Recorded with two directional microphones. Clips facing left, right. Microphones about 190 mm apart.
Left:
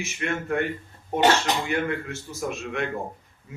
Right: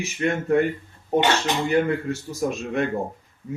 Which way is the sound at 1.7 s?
35° right (ahead or behind).